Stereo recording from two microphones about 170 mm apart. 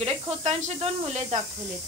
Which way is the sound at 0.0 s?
40° right (ahead or behind).